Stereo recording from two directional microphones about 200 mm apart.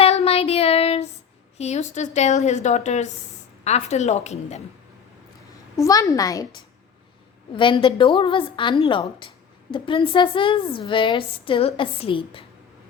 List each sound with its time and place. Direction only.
0.0 s child singing: 30° left (ahead or behind)
1.5 s a woman's voice: 35° left (ahead or behind)
5.7 s a woman's voice: 15° left (ahead or behind)